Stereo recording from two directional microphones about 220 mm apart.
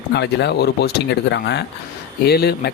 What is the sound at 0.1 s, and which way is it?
Speech, 50° left (ahead or behind).